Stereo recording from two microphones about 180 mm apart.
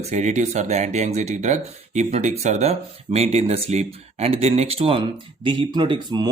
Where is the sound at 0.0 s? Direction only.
40° right (ahead or behind).